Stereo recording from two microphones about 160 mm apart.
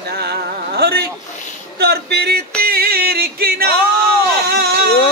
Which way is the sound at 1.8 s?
90° right.